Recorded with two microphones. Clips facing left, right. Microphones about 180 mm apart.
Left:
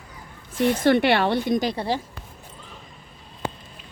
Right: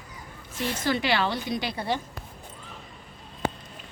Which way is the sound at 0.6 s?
60° left (ahead or behind).